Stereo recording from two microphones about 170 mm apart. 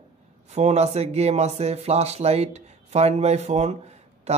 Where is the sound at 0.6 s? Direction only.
40° right (ahead or behind).